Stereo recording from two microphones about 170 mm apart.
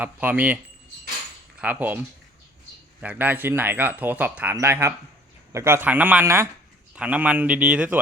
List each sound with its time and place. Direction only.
0.0 s speech: 10° right (ahead or behind)
3.0 s speech: 10° right (ahead or behind)